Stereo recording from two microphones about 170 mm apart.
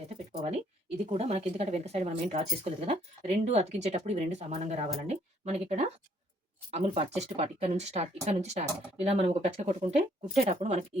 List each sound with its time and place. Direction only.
1.0 s a woman's voice: 40° right (ahead or behind)